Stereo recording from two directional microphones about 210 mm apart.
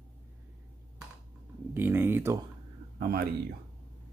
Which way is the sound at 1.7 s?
10° right (ahead or behind).